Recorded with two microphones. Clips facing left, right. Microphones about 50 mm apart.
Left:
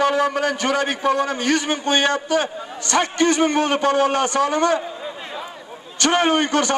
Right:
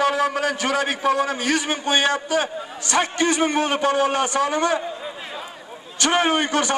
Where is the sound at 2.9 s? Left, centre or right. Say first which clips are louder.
Left 2 dB; right.